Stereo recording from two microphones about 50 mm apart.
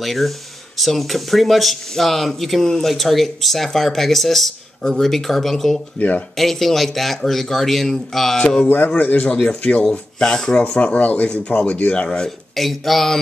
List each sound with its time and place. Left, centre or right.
0.0 s speech: centre
5.9 s a man's voice: left
6.3 s speech: centre
8.6 s a man's voice: left
9.6 s speech: left
12.5 s speech: centre